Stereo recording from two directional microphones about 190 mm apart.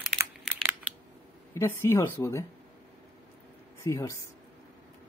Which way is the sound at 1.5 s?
15° left (ahead or behind).